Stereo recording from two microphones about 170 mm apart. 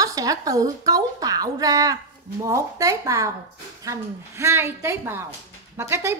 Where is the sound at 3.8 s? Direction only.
15° right (ahead or behind).